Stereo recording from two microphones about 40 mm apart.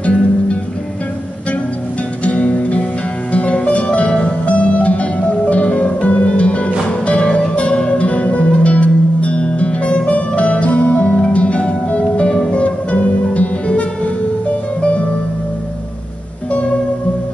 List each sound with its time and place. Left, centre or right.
2.2 s music: left